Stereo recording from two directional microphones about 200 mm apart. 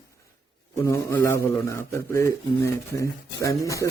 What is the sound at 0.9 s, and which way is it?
Speech, 15° left (ahead or behind).